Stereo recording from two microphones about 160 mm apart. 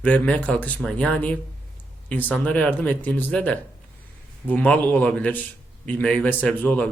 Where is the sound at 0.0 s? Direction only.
10° left (ahead or behind).